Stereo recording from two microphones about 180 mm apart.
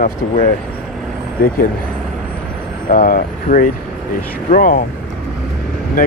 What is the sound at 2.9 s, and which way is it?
Speech, 50° left (ahead or behind).